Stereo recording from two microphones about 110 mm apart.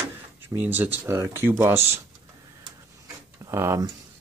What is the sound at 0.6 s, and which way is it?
Speech, 20° right (ahead or behind).